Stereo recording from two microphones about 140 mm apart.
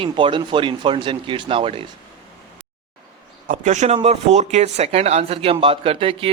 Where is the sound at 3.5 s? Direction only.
55° right (ahead or behind); by 6.3 s 40° right (ahead or behind).